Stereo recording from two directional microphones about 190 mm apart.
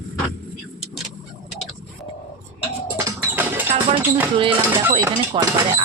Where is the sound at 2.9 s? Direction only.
10° right (ahead or behind).